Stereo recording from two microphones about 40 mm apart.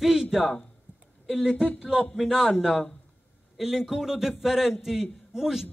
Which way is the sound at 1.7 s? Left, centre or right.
Right.